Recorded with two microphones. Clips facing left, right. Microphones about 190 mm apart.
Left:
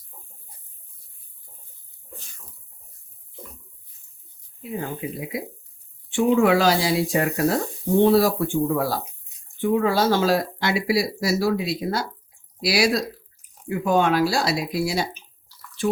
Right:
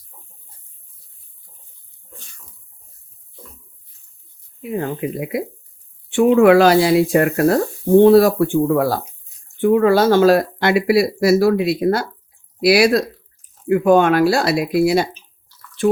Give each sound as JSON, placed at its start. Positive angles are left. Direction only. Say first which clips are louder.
{"t": 4.6, "sound": "speech", "louder": "right 7 dB", "side_deg": -60}